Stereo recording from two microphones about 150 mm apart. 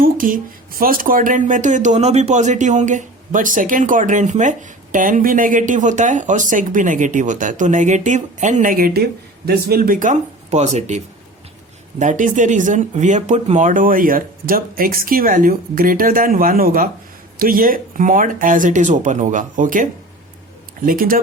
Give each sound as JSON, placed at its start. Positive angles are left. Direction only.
{"t": 0.0, "sound": "speech", "side_deg": -70}